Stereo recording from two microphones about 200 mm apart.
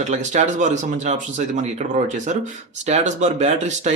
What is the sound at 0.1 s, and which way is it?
Speech, 35° right (ahead or behind).